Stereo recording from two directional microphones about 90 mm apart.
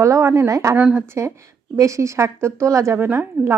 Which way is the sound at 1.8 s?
35° right (ahead or behind).